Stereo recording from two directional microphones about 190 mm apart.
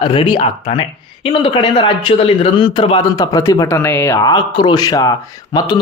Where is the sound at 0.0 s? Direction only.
25° left (ahead or behind).